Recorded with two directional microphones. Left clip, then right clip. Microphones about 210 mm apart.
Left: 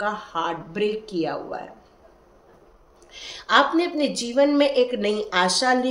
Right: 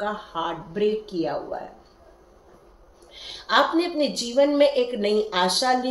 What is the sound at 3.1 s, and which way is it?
A woman's voice, 30° left (ahead or behind).